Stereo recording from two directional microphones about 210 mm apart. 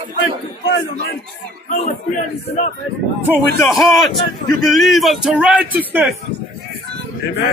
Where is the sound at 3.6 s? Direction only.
Centre (ahead or behind).